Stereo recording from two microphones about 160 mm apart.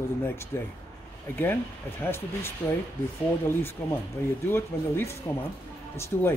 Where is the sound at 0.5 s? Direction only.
15° left (ahead or behind).